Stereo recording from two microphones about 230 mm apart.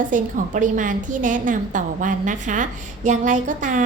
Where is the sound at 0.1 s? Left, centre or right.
Right.